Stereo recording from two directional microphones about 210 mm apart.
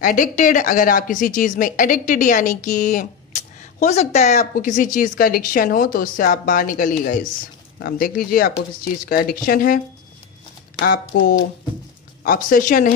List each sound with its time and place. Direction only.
0.0 s speech: 40° left (ahead or behind)
10.8 s speech: 45° left (ahead or behind)